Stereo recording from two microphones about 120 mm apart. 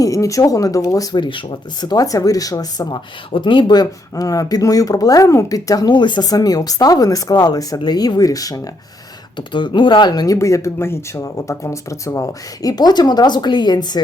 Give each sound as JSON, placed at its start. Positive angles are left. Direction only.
{"t": 0.0, "sound": "speech", "side_deg": 25}
{"t": 9.5, "sound": "speech", "side_deg": 40}